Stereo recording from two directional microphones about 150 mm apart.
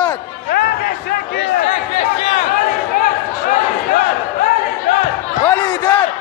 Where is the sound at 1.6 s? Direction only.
40° left (ahead or behind).